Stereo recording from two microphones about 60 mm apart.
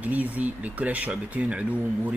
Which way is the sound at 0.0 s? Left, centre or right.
Right.